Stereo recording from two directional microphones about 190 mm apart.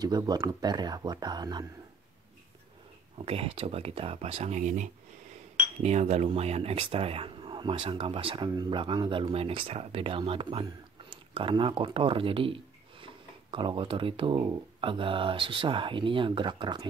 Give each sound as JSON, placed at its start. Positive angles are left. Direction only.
{"t": 0.0, "sound": "speech", "side_deg": -20}
{"t": 3.2, "sound": "speech", "side_deg": -30}